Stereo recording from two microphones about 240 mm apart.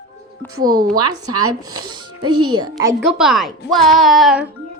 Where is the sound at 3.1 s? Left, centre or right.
Centre.